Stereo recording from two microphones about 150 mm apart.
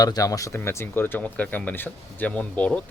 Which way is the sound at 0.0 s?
25° left (ahead or behind).